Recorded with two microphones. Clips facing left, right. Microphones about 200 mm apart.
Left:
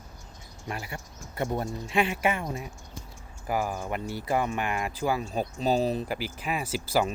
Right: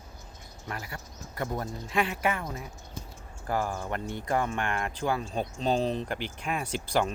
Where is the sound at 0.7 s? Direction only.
25° left (ahead or behind).